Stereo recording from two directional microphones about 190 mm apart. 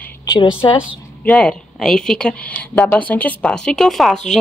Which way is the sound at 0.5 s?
25° left (ahead or behind).